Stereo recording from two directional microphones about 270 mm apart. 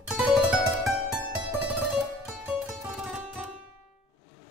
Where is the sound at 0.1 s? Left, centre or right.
Centre.